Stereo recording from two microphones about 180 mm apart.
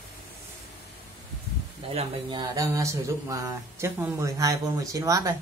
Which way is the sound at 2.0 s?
25° right (ahead or behind).